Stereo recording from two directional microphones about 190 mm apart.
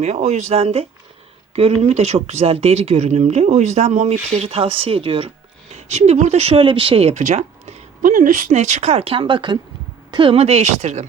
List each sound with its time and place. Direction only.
0.0 s speech: 40° right (ahead or behind)